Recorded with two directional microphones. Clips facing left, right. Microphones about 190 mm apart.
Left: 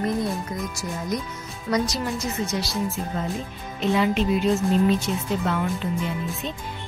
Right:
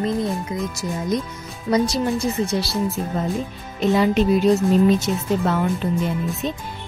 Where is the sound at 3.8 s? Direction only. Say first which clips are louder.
Right 4 dB; 40° right (ahead or behind).